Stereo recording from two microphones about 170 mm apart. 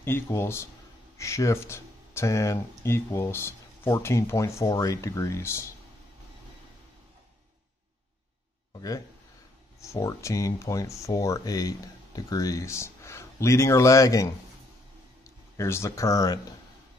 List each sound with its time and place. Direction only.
0.0 s speech: 15° left (ahead or behind)
8.7 s a sound: 20° left (ahead or behind)
9.8 s speech: 20° left (ahead or behind)